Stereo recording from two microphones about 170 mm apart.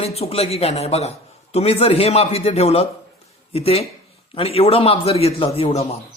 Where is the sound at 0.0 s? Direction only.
35° left (ahead or behind).